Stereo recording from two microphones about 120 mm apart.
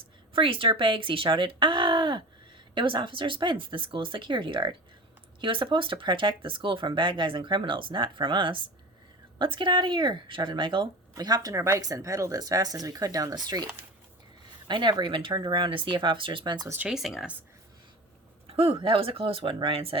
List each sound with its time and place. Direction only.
0.3 s speech: 45° right (ahead or behind)
11.1 s speech: 30° right (ahead or behind)
14.7 s speech: 40° right (ahead or behind)
16.6 s speech: 15° right (ahead or behind)
18.4 s speech: 55° right (ahead or behind)